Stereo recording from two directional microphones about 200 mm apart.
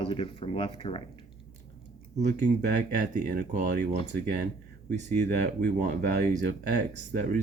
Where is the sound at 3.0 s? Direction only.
50° right (ahead or behind).